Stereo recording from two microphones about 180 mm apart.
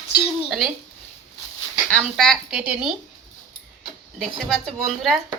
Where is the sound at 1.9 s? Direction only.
Centre (ahead or behind).